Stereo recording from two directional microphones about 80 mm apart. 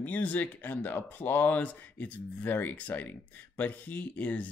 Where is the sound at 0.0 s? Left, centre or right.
Centre.